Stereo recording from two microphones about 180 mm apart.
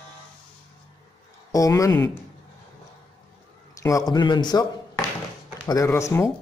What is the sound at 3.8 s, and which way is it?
Speech, 20° left (ahead or behind).